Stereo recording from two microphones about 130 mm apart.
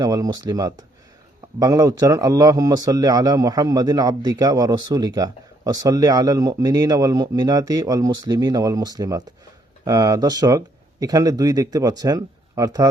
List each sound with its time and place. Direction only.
0.0 s a man's voice: 30° right (ahead or behind)